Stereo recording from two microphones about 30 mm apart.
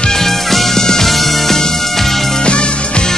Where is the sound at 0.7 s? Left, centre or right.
Centre.